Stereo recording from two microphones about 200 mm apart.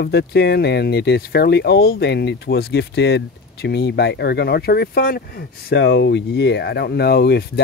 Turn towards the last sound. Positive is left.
turn(degrees=55)  # may be behind; listen again after turning